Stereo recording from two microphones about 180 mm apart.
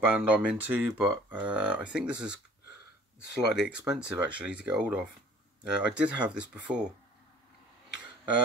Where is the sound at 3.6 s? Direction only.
5° right (ahead or behind).